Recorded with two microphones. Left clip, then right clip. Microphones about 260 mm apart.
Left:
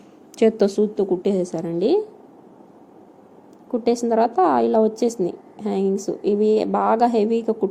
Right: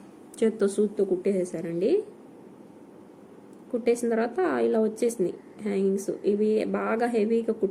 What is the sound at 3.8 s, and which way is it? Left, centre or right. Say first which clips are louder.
A woman's voice: left 6 dB; centre.